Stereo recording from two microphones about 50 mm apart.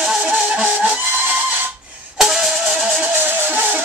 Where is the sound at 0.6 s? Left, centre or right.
Right.